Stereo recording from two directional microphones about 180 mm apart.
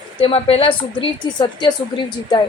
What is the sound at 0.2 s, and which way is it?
A woman's voice, 30° left (ahead or behind).